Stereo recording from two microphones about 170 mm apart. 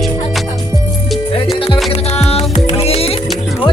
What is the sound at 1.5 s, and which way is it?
Music, 30° left (ahead or behind).